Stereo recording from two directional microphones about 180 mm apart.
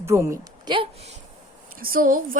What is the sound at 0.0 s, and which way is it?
Speech, 15° right (ahead or behind).